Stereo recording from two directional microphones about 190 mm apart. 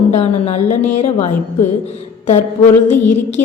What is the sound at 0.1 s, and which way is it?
A woman's voice, 35° left (ahead or behind).